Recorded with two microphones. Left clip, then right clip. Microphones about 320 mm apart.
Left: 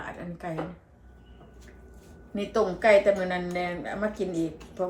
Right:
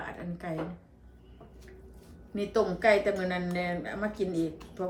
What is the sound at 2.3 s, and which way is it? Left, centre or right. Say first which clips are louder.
A woman's voice: left 2 dB; centre.